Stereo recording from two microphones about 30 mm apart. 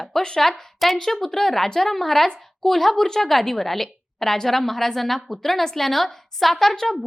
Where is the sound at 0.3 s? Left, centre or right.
Centre.